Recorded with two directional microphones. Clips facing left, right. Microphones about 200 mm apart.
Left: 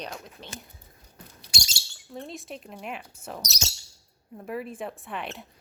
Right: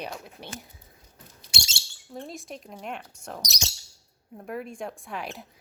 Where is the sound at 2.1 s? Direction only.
Centre (ahead or behind).